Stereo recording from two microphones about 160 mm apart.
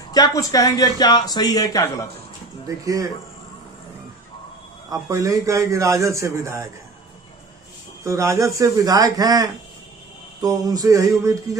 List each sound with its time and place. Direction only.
0.1 s speech: 25° left (ahead or behind)
2.6 s a man's voice: 20° right (ahead or behind)
5.0 s a man's voice: 20° right (ahead or behind)
8.0 s a man's voice: 20° right (ahead or behind)